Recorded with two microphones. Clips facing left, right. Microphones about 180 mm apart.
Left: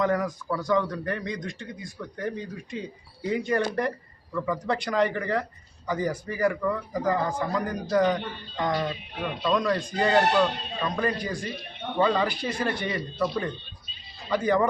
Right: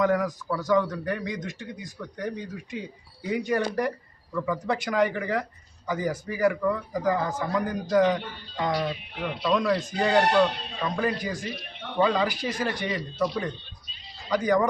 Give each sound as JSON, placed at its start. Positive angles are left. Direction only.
{"t": 0.0, "sound": "a man's voice", "side_deg": 0}
{"t": 13.1, "sound": "speech", "side_deg": -15}
{"t": 14.3, "sound": "a man's voice", "side_deg": 0}